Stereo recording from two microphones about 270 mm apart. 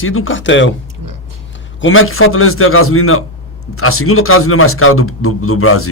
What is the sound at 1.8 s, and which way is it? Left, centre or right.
A man's voice, left.